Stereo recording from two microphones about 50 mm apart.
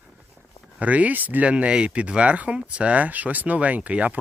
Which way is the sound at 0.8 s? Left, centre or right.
Right.